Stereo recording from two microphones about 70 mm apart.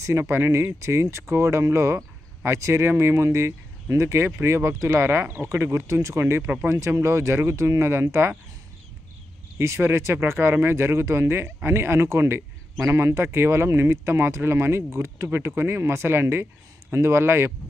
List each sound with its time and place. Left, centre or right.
0.2 s speech: right
6.4 s speech: right
6.7 s speech: right
9.6 s speech: right